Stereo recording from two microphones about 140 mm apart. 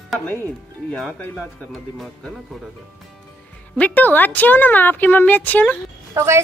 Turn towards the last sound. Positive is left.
turn(degrees=-20)  # may be behind; listen again after turning